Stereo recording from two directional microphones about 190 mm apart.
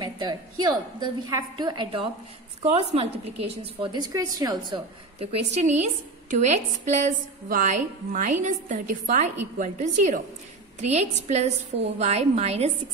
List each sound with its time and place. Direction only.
0.0 s a woman's voice: 20° right (ahead or behind)